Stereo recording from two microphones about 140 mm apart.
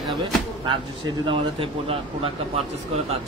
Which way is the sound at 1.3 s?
40° right (ahead or behind).